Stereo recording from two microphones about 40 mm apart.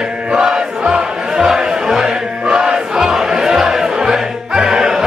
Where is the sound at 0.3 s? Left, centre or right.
Centre.